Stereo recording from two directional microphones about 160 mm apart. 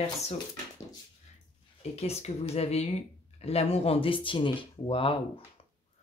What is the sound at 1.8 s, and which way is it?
Speech, 40° left (ahead or behind).